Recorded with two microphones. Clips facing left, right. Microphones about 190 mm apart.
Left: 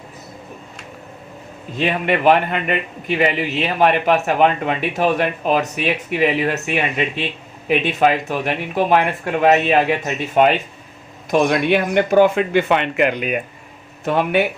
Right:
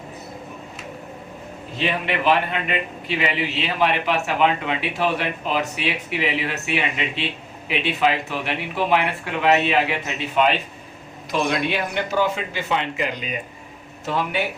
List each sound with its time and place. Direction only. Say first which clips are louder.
1.7 s a man's voice: left 5 dB; 50° left (ahead or behind)